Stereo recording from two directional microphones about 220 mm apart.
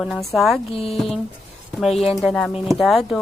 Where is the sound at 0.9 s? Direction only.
Centre (ahead or behind).